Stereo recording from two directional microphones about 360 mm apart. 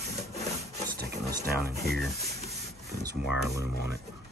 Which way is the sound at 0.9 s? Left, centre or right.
Right.